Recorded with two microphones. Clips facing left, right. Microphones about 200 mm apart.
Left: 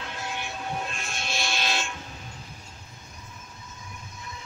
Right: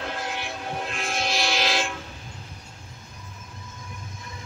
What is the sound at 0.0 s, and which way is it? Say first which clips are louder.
Vehicle: right 4 dB; 60° right (ahead or behind).